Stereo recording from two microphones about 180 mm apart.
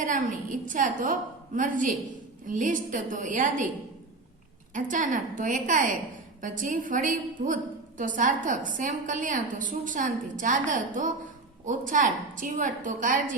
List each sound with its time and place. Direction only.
0.0 s a woman's voice: 45° right (ahead or behind)
4.7 s a woman's voice: 45° right (ahead or behind)